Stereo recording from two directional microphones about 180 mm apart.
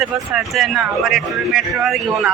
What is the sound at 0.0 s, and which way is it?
Speech, centre (ahead or behind).